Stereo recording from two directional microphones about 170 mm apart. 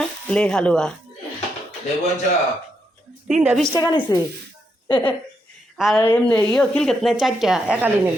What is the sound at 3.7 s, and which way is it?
Speech, 20° left (ahead or behind).